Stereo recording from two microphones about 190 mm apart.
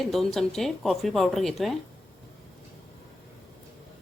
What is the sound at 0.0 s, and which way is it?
Speech, centre (ahead or behind).